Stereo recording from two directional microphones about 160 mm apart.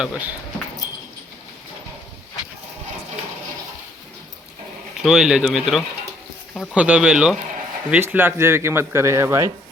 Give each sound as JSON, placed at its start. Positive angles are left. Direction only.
{"t": 0.0, "sound": "speech", "side_deg": -10}
{"t": 4.9, "sound": "speech", "side_deg": -5}